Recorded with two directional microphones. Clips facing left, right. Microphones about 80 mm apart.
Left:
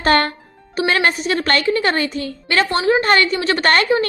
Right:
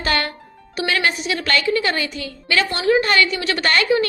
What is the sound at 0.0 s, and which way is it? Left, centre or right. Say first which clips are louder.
A child's voice: left 6 dB; left.